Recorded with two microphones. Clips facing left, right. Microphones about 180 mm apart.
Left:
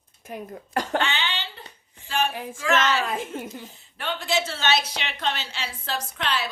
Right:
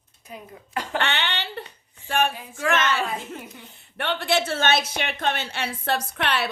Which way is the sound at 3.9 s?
65° right (ahead or behind).